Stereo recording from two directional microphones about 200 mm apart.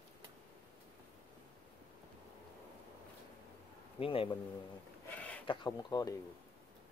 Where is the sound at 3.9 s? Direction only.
25° left (ahead or behind).